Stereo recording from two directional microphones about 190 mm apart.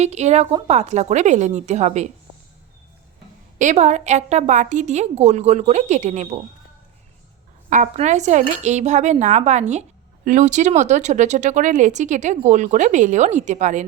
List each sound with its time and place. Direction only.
0.0 s speech: 35° right (ahead or behind)
3.6 s speech: 40° right (ahead or behind)
7.7 s speech: 40° right (ahead or behind)